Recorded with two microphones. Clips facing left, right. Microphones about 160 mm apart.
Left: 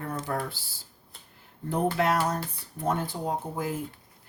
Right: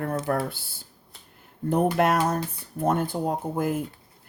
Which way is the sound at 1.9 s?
55° right (ahead or behind).